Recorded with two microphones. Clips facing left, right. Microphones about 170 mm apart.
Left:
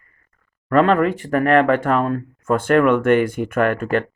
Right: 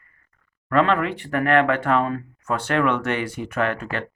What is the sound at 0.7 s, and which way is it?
Speech, 45° left (ahead or behind).